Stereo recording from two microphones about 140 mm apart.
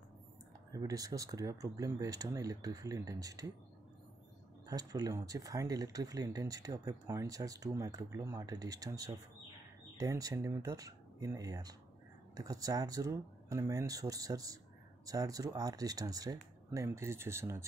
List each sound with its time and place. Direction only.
0.7 s speech: 25° right (ahead or behind)
4.6 s speech: 25° right (ahead or behind)